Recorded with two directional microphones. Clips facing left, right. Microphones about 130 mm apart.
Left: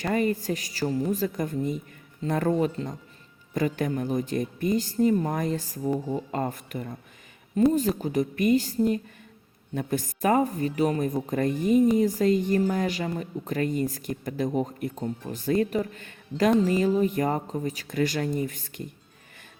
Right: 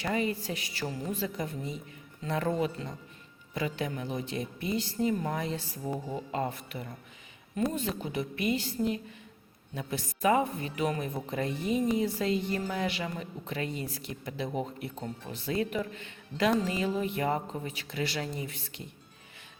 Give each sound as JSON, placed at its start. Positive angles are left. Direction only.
{"t": 0.0, "sound": "speech", "side_deg": 50}